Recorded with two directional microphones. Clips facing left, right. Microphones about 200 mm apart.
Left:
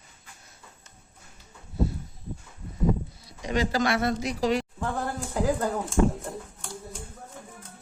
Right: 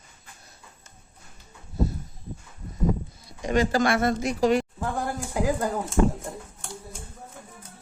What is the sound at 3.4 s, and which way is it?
Speech, 50° right (ahead or behind).